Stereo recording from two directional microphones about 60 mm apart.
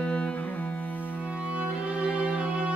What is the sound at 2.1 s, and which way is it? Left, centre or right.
Music, centre.